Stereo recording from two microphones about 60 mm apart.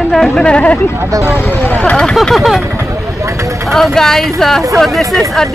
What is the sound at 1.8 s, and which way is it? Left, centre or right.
Speech, centre.